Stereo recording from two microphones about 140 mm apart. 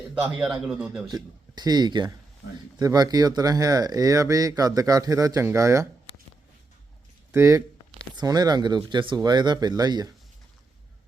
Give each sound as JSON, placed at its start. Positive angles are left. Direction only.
{"t": 0.1, "sound": "a man's voice", "side_deg": -5}
{"t": 1.1, "sound": "speech", "side_deg": -30}
{"t": 7.3, "sound": "speech", "side_deg": -20}